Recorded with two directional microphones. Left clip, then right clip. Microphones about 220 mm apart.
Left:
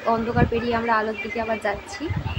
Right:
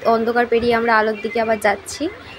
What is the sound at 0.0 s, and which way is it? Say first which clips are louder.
A woman's voice: right 6 dB; 20° right (ahead or behind).